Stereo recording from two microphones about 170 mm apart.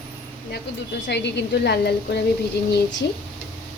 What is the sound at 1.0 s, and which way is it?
A woman's voice, 90° left.